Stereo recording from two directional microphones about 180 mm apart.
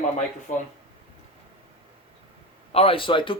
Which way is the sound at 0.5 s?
45° left (ahead or behind).